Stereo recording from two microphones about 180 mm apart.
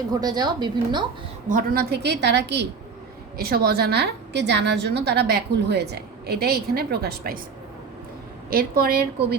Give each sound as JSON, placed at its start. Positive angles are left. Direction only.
{"t": 0.1, "sound": "a woman's voice", "side_deg": -20}
{"t": 1.5, "sound": "a woman's voice", "side_deg": -50}
{"t": 3.3, "sound": "a woman's voice", "side_deg": -55}
{"t": 8.4, "sound": "a woman's voice", "side_deg": -55}